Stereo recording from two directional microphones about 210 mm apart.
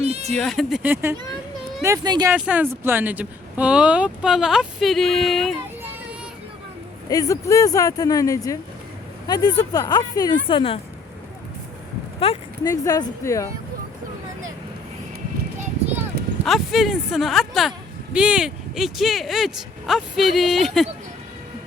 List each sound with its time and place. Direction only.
0.0 s a sound: 30° right (ahead or behind)
0.3 s speech: centre (ahead or behind); by 2.3 s 20° right (ahead or behind)
2.3 s speech: 5° right (ahead or behind)
7.1 s speech: 15° left (ahead or behind)
12.2 s speech: 25° left (ahead or behind)
12.7 s speech: 15° left (ahead or behind)
16.4 s speech: centre (ahead or behind)